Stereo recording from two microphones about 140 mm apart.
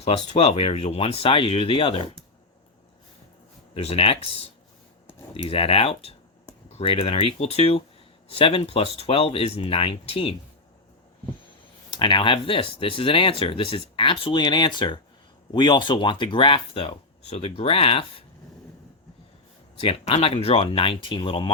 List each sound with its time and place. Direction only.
0.0 s speech: 50° left (ahead or behind)
3.8 s speech: 45° left (ahead or behind)
11.9 s speech: 35° left (ahead or behind)
19.8 s speech: 45° left (ahead or behind)